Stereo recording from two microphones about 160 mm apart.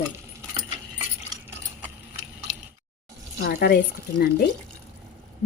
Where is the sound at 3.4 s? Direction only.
70° left (ahead or behind).